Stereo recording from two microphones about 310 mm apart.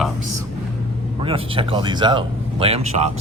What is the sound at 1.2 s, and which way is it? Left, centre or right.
Speech, centre.